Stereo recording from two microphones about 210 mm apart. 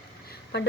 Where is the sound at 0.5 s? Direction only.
55° left (ahead or behind).